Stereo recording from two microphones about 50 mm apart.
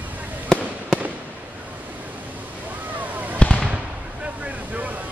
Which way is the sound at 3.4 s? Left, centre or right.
Left.